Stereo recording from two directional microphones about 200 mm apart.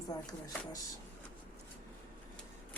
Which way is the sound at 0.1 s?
20° left (ahead or behind).